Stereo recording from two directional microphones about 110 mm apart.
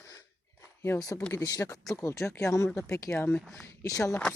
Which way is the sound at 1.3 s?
30° left (ahead or behind).